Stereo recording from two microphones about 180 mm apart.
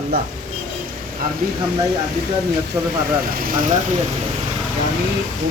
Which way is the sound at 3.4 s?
50° right (ahead or behind).